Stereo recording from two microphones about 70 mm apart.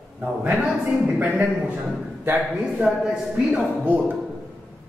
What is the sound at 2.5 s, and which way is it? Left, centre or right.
A man's voice, centre.